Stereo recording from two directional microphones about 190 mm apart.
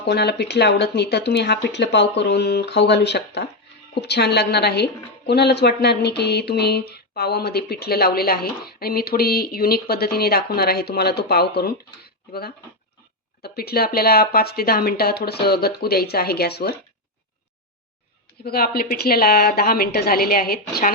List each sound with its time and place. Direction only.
0.0 s a woman's voice: 60° left (ahead or behind)
18.4 s a woman's voice: 55° left (ahead or behind)